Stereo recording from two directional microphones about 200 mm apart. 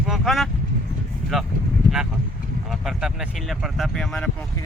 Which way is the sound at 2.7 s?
Centre (ahead or behind).